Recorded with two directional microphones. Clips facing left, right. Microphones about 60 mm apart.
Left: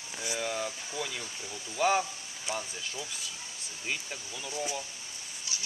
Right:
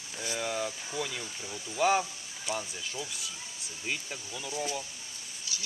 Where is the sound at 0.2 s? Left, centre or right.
Centre.